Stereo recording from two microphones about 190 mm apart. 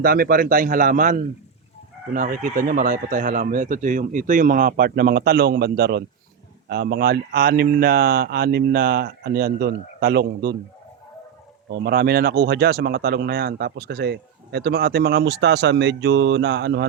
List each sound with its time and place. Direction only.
0.0 s speech: 50° right (ahead or behind)
11.7 s speech: 55° right (ahead or behind)